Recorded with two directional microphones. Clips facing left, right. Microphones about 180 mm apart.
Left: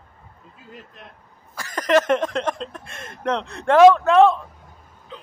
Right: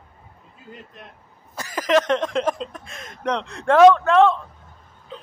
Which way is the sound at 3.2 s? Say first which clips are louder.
Left 1 dB; 5° left (ahead or behind).